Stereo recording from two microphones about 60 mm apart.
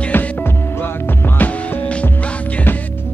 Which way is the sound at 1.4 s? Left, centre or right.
Left.